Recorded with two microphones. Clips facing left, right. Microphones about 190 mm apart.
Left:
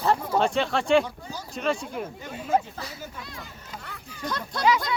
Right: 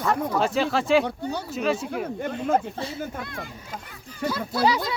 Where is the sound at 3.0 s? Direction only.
55° right (ahead or behind).